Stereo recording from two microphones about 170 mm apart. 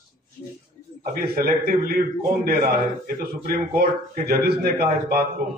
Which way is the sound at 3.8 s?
65° right (ahead or behind).